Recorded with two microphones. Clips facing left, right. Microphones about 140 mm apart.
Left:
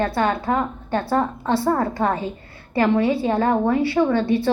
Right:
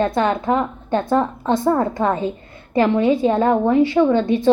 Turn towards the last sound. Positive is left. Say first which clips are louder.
# right 4 dB
turn(degrees=-15)  # may be behind; listen again after turning